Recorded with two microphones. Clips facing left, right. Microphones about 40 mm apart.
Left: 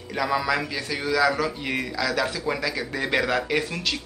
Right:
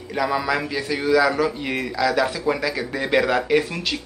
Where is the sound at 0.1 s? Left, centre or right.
Centre.